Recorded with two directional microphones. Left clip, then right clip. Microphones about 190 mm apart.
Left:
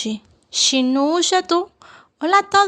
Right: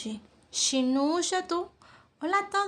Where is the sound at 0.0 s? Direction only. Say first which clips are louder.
Left 12 dB; 45° left (ahead or behind).